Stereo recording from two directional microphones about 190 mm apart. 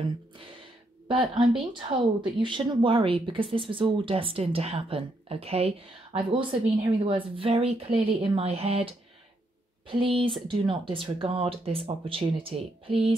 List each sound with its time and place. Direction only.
1.0 s a woman's voice: 25° right (ahead or behind)